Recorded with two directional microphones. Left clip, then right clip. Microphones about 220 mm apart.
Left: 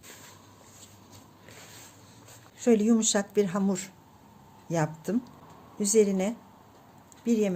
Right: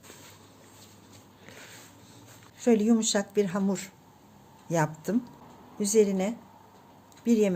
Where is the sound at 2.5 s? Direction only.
5° left (ahead or behind).